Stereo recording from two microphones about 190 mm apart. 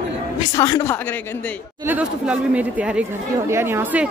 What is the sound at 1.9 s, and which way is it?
Speech, 5° right (ahead or behind).